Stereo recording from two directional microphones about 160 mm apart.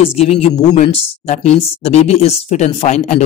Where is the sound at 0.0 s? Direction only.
40° left (ahead or behind).